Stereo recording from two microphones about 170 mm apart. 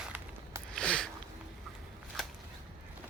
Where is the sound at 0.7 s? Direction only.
5° left (ahead or behind).